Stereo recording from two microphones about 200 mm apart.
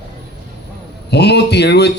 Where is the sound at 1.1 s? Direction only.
55° left (ahead or behind).